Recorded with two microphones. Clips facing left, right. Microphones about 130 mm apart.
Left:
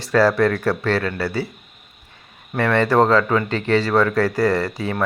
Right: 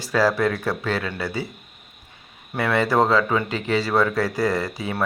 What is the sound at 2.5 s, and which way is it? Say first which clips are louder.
Speech: left 3 dB; 10° right (ahead or behind).